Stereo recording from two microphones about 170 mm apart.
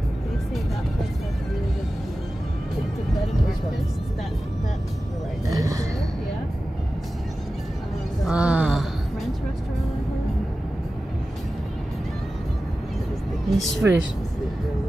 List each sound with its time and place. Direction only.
5.5 s speech: 20° right (ahead or behind)
8.3 s a sound: 5° right (ahead or behind)
13.5 s a woman's voice: centre (ahead or behind)